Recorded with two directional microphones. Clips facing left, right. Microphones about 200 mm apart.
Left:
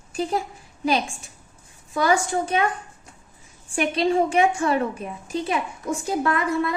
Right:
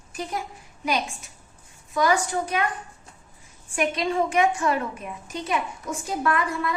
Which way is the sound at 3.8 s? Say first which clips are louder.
Left 3 dB; 30° left (ahead or behind).